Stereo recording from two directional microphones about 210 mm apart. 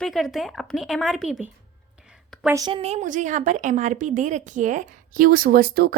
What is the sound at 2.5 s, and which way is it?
Speech, 20° right (ahead or behind).